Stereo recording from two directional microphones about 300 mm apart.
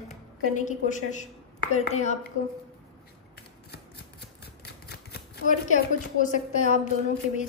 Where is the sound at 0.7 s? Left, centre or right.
Left.